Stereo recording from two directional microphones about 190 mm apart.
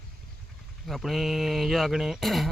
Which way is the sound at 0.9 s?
Centre (ahead or behind).